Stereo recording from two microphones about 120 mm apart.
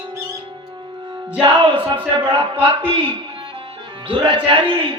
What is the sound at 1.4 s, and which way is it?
Speech, 45° right (ahead or behind).